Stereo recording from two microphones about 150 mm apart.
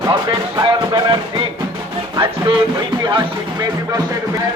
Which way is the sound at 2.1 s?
35° right (ahead or behind).